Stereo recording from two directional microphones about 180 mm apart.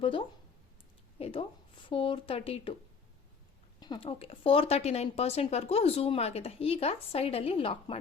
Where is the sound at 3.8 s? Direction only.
25° left (ahead or behind).